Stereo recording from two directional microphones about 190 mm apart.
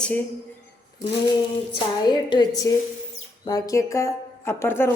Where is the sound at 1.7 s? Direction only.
25° left (ahead or behind).